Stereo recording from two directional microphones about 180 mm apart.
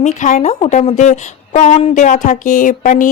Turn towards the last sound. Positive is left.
turn(degrees=45)  # may be behind; listen again after turning